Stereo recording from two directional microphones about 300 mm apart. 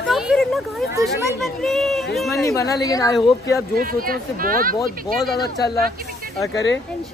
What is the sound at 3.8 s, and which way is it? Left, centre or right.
Speech, right.